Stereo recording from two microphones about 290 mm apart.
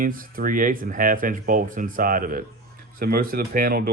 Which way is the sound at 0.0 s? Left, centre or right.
Right.